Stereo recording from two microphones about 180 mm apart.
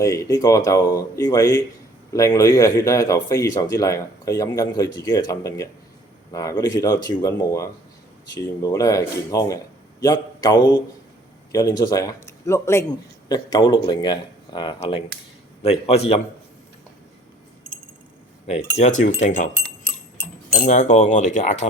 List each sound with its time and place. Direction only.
0.0 s a man's voice: 20° left (ahead or behind); by 16.2 s 35° left (ahead or behind)
18.4 s speech: 40° left (ahead or behind)
20.5 s speech: 45° left (ahead or behind)